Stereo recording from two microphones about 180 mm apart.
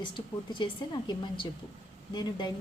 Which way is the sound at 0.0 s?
25° left (ahead or behind).